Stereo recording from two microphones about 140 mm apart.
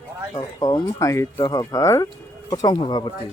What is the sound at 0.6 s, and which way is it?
Speech, 25° left (ahead or behind).